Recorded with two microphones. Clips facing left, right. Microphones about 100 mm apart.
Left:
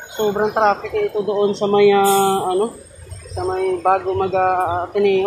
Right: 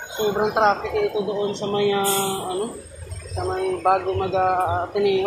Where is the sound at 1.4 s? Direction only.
80° left.